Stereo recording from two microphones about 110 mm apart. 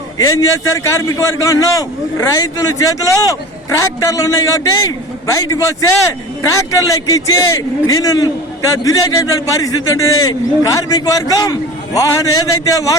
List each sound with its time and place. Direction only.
0.2 s a man's voice: 30° left (ahead or behind)